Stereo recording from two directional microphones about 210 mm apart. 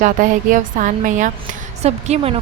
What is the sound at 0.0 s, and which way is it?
A woman's voice, 40° right (ahead or behind).